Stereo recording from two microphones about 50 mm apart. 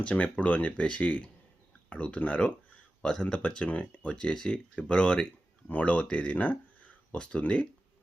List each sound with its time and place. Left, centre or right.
0.0 s speech: left